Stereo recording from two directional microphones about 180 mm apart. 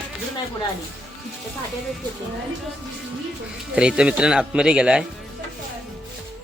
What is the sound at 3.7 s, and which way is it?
Speech, 5° right (ahead or behind).